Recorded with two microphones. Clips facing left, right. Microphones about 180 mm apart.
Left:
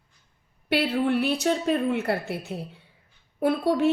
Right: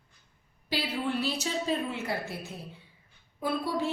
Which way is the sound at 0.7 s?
65° left (ahead or behind).